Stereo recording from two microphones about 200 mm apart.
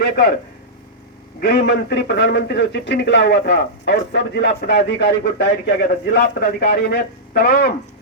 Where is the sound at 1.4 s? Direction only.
55° left (ahead or behind).